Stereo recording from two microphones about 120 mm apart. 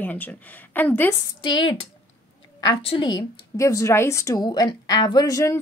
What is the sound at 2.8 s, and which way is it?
Speech, 55° left (ahead or behind).